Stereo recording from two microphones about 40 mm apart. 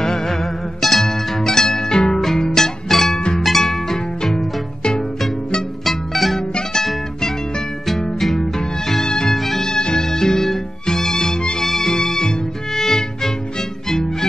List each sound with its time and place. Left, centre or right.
0.0 s music: centre
5.9 s music: centre
8.4 s cat: centre
9.3 s music: centre
9.7 s music: centre